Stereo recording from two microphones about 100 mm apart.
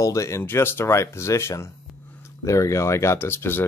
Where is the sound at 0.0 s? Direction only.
30° left (ahead or behind).